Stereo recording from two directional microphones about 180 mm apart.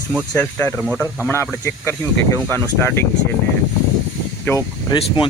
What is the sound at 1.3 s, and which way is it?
Speech, 15° left (ahead or behind).